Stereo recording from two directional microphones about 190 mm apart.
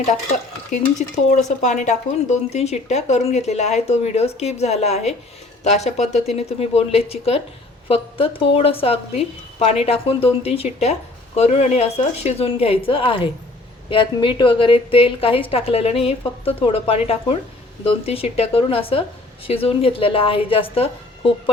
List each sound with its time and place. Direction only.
0.0 s stir: 40° left (ahead or behind)
7.9 s a woman's voice: 30° left (ahead or behind)
8.5 s stir: 30° left (ahead or behind)
13.9 s a woman's voice: 25° left (ahead or behind)
18.0 s stir: 30° left (ahead or behind)
19.5 s a woman's voice: 30° left (ahead or behind)